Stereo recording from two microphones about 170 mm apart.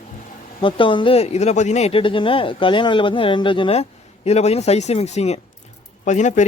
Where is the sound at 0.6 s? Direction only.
30° left (ahead or behind).